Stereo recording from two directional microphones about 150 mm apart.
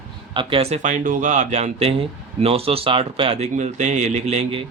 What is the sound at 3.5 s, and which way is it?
Speech, 55° right (ahead or behind).